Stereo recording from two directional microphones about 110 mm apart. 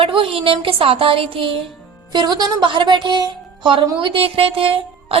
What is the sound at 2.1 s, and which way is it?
A woman's voice, 40° right (ahead or behind).